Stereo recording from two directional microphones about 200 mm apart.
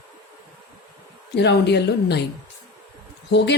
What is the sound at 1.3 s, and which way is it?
Speech, 60° left (ahead or behind).